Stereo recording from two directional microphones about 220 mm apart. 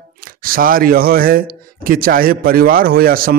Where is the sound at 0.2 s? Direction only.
40° right (ahead or behind).